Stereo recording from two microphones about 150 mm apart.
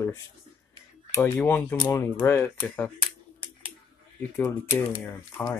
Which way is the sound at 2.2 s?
15° left (ahead or behind).